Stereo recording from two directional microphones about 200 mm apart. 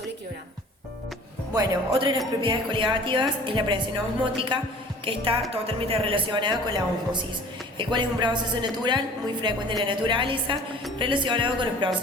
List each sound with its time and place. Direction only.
1.5 s a woman's voice: 25° right (ahead or behind)
5.0 s a woman's voice: 25° right (ahead or behind)